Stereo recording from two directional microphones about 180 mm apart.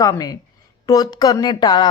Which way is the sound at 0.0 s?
20° left (ahead or behind).